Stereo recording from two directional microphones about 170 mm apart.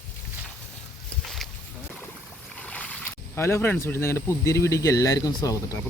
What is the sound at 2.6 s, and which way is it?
Speech, 5° left (ahead or behind).